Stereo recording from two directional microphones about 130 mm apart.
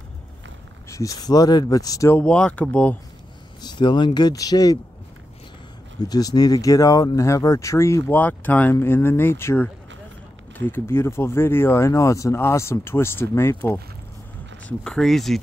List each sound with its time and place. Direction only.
0.8 s speech: 25° left (ahead or behind)
2.1 s speech: 10° left (ahead or behind)
3.6 s speech: 35° left (ahead or behind)
5.9 s speech: 30° left (ahead or behind)
10.7 s speech: 20° left (ahead or behind)
14.7 s speech: 5° left (ahead or behind)